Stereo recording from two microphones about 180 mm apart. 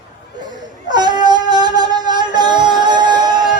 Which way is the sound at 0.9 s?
25° right (ahead or behind).